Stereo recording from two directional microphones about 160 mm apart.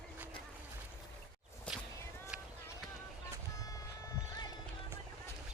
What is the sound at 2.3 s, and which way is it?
Run, 10° right (ahead or behind).